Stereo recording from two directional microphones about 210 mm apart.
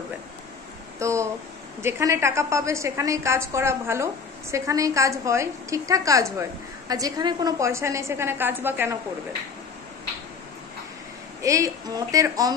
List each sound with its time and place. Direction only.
0.9 s a woman's voice: 15° right (ahead or behind)
11.4 s a woman's voice: 15° right (ahead or behind)